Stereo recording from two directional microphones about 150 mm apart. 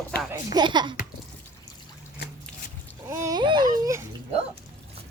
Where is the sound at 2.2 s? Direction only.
90° left.